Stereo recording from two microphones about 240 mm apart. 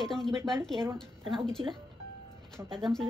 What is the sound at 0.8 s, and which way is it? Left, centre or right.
Speech, centre.